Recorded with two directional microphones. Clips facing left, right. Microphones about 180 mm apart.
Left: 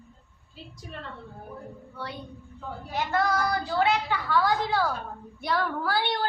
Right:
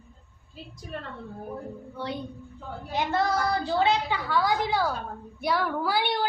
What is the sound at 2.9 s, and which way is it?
A woman's voice, 25° right (ahead or behind).